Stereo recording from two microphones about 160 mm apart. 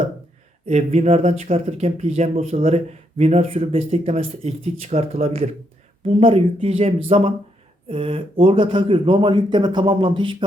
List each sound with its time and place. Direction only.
0.7 s speech: 45° right (ahead or behind)